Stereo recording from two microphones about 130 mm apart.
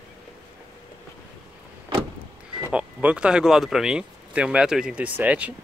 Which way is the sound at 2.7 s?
10° right (ahead or behind).